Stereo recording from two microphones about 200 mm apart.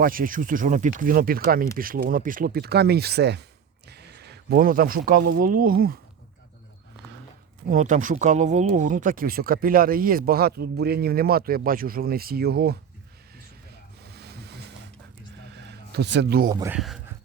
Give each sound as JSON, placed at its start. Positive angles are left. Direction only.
{"t": 0.0, "sound": "speech", "side_deg": -45}
{"t": 7.7, "sound": "speech", "side_deg": -40}
{"t": 14.1, "sound": "vehicle", "side_deg": -55}
{"t": 15.7, "sound": "speech", "side_deg": -55}
{"t": 16.5, "sound": "speech", "side_deg": -20}
{"t": 16.7, "sound": "speech", "side_deg": 0}